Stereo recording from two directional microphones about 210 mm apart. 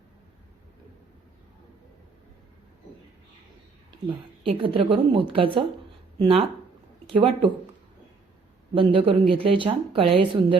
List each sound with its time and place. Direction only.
4.4 s a woman's voice: 25° right (ahead or behind)
8.7 s a woman's voice: 25° right (ahead or behind)